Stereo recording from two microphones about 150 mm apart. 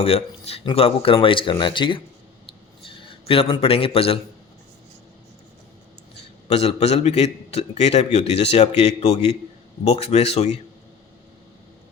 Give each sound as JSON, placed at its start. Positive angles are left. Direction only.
{"t": 0.0, "sound": "a man's voice", "side_deg": 45}
{"t": 6.5, "sound": "a man's voice", "side_deg": 45}